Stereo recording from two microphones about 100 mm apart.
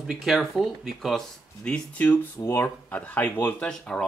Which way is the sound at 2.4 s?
25° left (ahead or behind).